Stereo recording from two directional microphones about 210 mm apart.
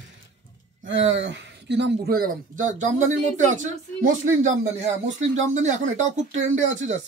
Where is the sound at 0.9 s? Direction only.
60° right (ahead or behind); by 6.1 s 35° right (ahead or behind).